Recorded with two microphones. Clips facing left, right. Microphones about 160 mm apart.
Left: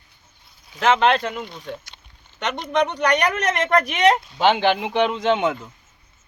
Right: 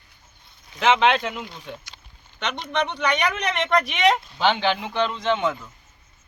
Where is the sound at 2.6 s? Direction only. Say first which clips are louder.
Left 5 dB; 45° left (ahead or behind).